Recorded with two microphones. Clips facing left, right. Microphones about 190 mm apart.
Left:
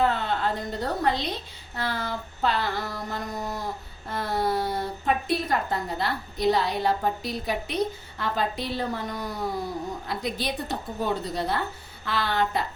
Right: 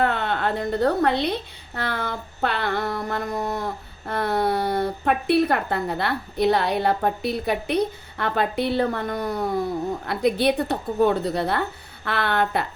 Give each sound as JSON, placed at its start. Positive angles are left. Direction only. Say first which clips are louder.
{"t": 0.0, "sound": "a woman's voice", "louder": "right 2 dB", "side_deg": -60}